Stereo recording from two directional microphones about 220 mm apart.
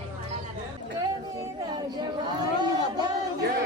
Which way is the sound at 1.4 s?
20° right (ahead or behind).